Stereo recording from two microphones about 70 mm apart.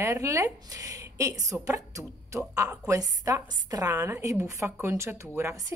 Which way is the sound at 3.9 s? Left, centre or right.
Right.